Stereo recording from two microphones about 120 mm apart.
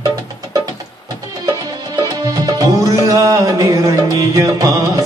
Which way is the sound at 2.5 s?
30° right (ahead or behind).